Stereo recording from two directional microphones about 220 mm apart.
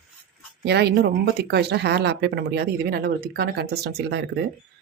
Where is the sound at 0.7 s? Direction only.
50° right (ahead or behind).